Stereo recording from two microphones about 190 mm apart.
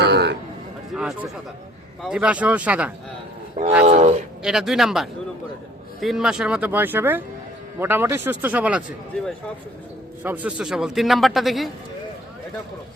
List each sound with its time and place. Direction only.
0.0 s a sound: 60° right (ahead or behind)
0.9 s a man's voice: 5° right (ahead or behind)
3.8 s speech: 35° right (ahead or behind)
4.4 s a man's voice: centre (ahead or behind)
10.2 s a man's voice: 10° right (ahead or behind)